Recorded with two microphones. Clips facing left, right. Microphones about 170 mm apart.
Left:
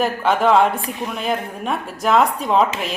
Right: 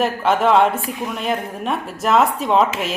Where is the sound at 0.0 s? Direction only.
Centre (ahead or behind).